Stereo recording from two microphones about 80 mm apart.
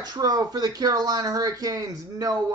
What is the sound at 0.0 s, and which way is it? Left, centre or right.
Speech, right.